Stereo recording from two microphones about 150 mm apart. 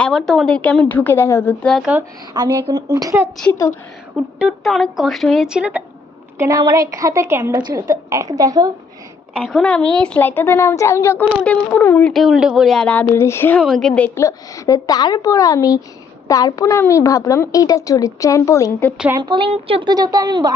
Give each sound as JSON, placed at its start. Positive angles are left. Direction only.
{"t": 0.0, "sound": "a woman's voice", "side_deg": 5}
{"t": 2.3, "sound": "a woman's voice", "side_deg": -30}
{"t": 4.4, "sound": "speech", "side_deg": 0}
{"t": 6.4, "sound": "a woman's voice", "side_deg": -25}
{"t": 9.3, "sound": "a woman's voice", "side_deg": 5}
{"t": 12.1, "sound": "speech", "side_deg": 0}
{"t": 13.6, "sound": "speech", "side_deg": 0}
{"t": 14.2, "sound": "a woman's voice", "side_deg": 20}
{"t": 19.1, "sound": "a woman's voice", "side_deg": -30}